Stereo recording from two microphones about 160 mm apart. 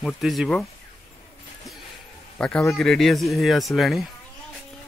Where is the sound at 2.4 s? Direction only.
5° left (ahead or behind).